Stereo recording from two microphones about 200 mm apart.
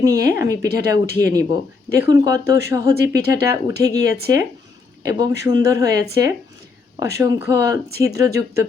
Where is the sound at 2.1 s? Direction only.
20° right (ahead or behind).